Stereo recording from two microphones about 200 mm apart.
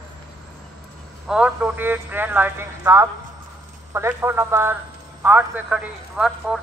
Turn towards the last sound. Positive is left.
turn(degrees=-5)  # may be behind; listen again after turning